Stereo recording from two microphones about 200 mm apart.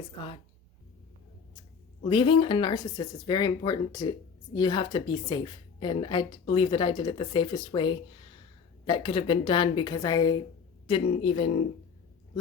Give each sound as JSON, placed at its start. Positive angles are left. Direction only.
{"t": 2.0, "sound": "a woman's voice", "side_deg": 25}